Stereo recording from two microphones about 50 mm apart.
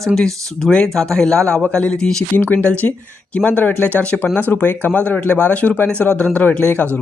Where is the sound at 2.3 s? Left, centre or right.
Left.